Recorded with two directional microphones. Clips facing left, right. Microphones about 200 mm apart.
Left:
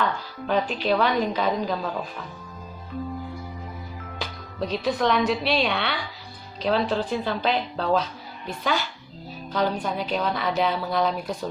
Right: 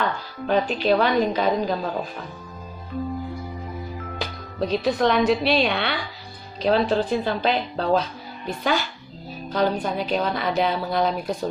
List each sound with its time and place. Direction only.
0.0 s a woman's voice: 40° right (ahead or behind)
4.2 s speech: 40° right (ahead or behind)
6.6 s speech: 40° right (ahead or behind)
9.5 s a woman's voice: 45° right (ahead or behind)